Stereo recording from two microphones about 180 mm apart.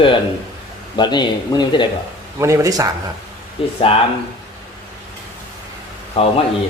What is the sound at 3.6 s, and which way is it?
Speech, 30° left (ahead or behind).